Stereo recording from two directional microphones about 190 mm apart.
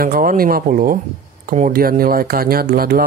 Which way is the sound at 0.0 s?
50° right (ahead or behind).